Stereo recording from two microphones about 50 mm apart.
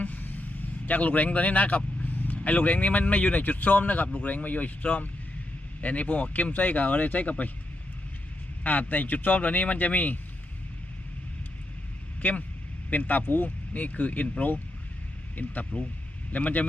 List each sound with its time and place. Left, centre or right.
0.0 s vehicle: left
0.9 s speech: left
8.6 s speech: left
12.2 s speech: left